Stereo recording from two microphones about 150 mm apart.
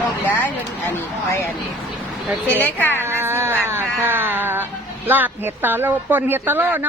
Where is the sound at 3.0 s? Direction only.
15° right (ahead or behind).